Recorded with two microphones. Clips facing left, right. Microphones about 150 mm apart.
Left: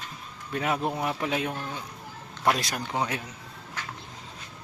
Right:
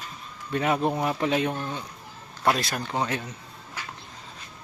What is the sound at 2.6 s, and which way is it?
Speech, 15° left (ahead or behind).